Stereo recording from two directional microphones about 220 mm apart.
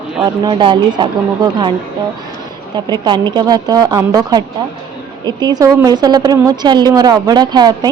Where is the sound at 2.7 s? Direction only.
20° right (ahead or behind).